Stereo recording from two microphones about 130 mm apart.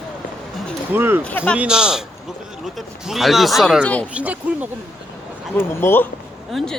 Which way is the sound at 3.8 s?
10° left (ahead or behind).